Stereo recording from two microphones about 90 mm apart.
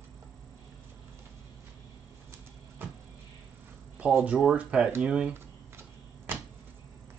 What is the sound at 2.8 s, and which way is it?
Vehicle, 25° right (ahead or behind).